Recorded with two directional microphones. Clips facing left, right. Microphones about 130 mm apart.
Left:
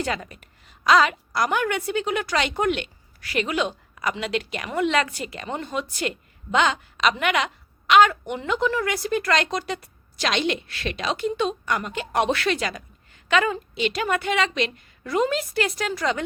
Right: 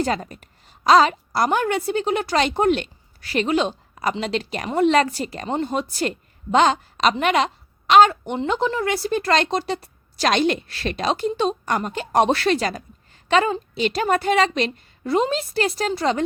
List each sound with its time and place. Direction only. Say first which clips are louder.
0.0 s a woman's voice: right 5 dB; 35° right (ahead or behind)